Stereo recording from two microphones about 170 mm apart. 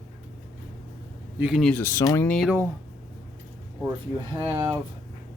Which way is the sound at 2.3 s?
5° left (ahead or behind).